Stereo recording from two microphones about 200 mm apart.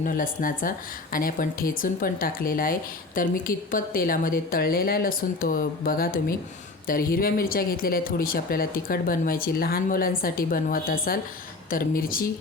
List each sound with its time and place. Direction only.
0.0 s speech: 45° left (ahead or behind)